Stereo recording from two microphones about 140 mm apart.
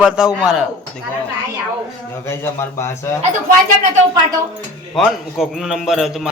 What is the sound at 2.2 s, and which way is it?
Speech, 20° left (ahead or behind).